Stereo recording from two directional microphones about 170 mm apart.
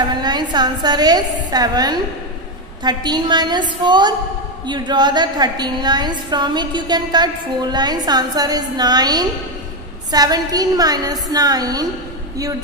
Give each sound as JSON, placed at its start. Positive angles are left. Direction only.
{"t": 0.2, "sound": "a woman's voice", "side_deg": -25}